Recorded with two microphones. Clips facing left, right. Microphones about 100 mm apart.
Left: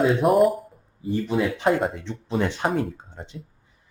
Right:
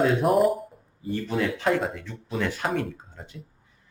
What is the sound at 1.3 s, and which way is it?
Speech, 20° left (ahead or behind).